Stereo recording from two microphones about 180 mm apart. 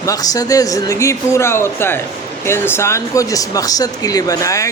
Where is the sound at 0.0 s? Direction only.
20° left (ahead or behind).